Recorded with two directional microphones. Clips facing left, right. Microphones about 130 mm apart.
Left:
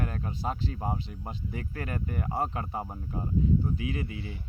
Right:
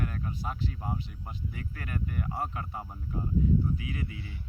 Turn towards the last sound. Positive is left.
turn(degrees=30)  # may be behind; listen again after turning